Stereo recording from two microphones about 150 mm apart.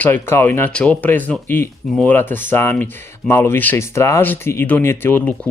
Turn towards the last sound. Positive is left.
turn(degrees=15)  # may be behind; listen again after turning